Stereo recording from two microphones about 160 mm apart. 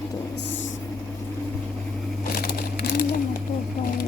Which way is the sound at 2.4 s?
70° left (ahead or behind).